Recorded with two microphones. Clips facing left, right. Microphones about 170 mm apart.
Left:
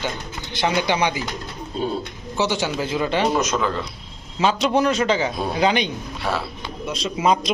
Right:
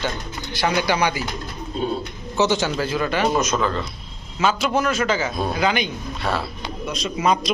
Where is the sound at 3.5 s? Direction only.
15° left (ahead or behind).